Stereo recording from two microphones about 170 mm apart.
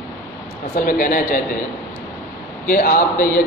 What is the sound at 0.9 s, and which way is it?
Speech, 55° left (ahead or behind).